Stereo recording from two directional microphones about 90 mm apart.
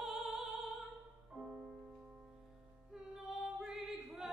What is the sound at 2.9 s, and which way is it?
Music, 5° right (ahead or behind).